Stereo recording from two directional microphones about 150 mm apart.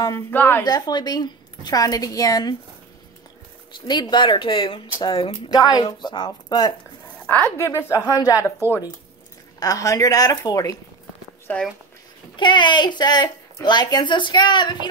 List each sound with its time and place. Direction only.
0.0 s a woman's voice: 15° left (ahead or behind)
0.7 s a woman's voice: 25° left (ahead or behind)
3.8 s a woman's voice: 30° left (ahead or behind)
9.6 s a woman's voice: 25° left (ahead or behind)
11.5 s a woman's voice: 10° left (ahead or behind)
12.4 s a woman's voice: 30° left (ahead or behind)